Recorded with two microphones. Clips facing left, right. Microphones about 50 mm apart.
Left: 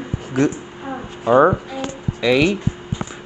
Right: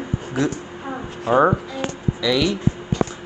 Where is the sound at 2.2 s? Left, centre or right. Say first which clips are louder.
Left 4 dB; left.